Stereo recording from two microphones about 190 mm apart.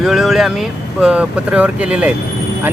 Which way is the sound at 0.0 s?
Centre (ahead or behind).